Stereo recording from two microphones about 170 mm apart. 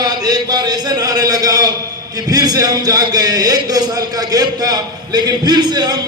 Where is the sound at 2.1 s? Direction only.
25° right (ahead or behind).